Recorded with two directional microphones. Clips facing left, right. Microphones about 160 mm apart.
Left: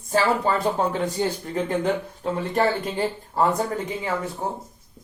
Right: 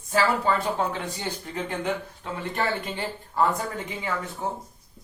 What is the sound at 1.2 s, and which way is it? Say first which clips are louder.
Speech: left 7 dB; 40° left (ahead or behind).